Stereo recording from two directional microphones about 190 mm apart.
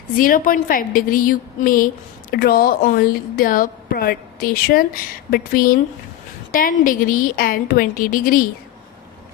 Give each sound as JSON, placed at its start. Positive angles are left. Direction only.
{"t": 0.2, "sound": "a woman's voice", "side_deg": 45}